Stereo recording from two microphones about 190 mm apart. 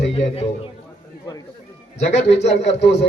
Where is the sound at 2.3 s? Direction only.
65° left (ahead or behind).